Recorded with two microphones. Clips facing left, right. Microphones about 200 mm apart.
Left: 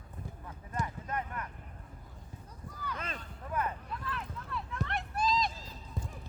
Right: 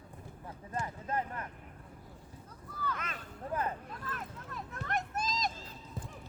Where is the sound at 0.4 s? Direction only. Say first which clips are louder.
Even; 30° right (ahead or behind).